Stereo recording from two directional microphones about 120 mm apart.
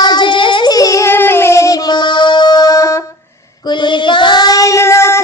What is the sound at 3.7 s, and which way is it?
Child singing, 40° left (ahead or behind).